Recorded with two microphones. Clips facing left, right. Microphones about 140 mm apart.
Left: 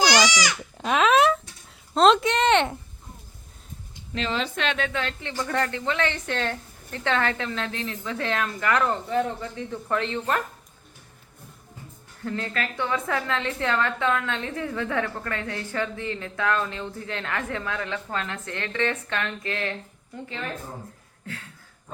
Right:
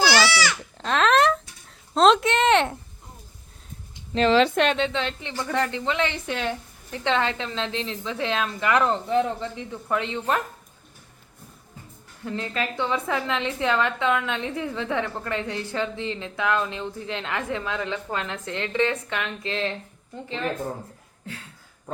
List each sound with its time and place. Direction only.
0.0 s speech: 15° left (ahead or behind); by 2.7 s centre (ahead or behind)
4.3 s speech: 80° right; by 4.7 s 60° right (ahead or behind)
4.8 s a woman's voice: 20° right (ahead or behind)
12.2 s a woman's voice: 20° right (ahead or behind)